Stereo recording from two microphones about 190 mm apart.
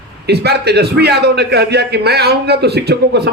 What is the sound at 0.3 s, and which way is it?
A man's voice, 60° right (ahead or behind).